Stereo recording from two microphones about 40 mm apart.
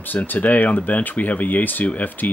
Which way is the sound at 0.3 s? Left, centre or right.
Left.